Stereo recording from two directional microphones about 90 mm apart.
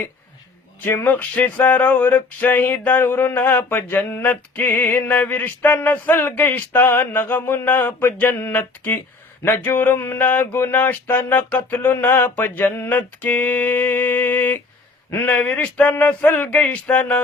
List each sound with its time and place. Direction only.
0.8 s male singing: 25° left (ahead or behind)
15.1 s speech: 20° left (ahead or behind)